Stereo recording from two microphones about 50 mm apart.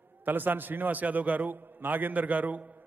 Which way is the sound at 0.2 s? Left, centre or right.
Right.